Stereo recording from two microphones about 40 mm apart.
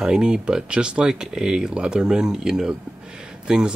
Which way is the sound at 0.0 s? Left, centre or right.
Centre.